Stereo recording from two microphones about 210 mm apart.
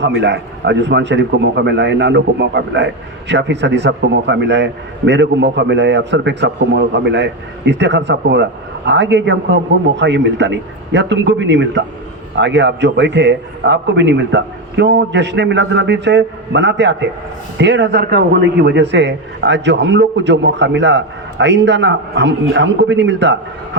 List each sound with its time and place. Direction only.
0.0 s a man's voice: 55° right (ahead or behind)